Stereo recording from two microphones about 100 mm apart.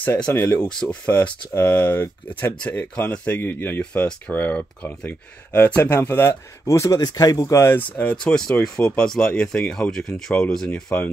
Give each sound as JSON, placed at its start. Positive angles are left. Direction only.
{"t": 0.0, "sound": "speech", "side_deg": 20}
{"t": 0.6, "sound": "speech", "side_deg": 5}
{"t": 8.0, "sound": "speech", "side_deg": 10}